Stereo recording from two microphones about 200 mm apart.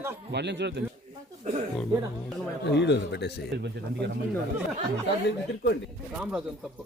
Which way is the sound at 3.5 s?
60° right (ahead or behind).